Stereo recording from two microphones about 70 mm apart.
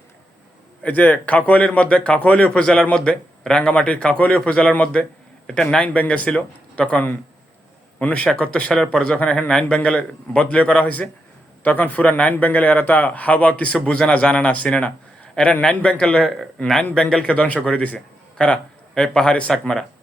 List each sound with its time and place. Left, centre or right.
0.8 s speech: left
2.5 s speech: centre
13.7 s a man's voice: centre